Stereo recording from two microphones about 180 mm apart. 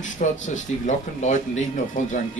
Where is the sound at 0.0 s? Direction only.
45° left (ahead or behind).